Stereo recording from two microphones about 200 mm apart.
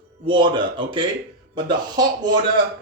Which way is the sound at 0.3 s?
25° right (ahead or behind).